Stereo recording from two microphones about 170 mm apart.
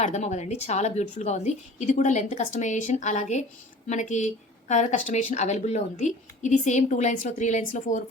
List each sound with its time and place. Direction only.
0.0 s a woman's voice: 45° left (ahead or behind)